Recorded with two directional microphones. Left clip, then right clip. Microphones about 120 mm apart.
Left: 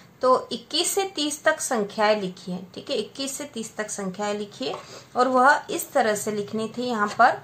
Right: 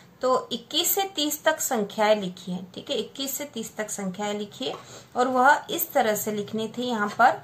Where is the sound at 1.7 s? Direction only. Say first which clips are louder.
Even; 35° left (ahead or behind).